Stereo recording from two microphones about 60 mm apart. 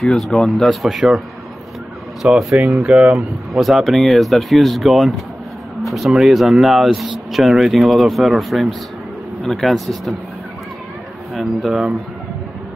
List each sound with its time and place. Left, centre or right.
0.0 s speech: centre
0.8 s speech: centre
2.2 s speech: centre
3.5 s speech: centre
11.3 s speech: centre